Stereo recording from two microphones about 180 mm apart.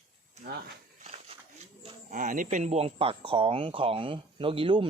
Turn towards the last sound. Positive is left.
turn(degrees=-30)  # may be behind; listen again after turning